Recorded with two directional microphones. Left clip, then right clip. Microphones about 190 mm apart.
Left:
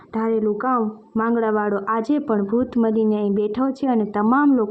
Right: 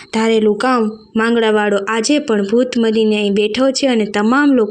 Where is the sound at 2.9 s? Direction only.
15° right (ahead or behind).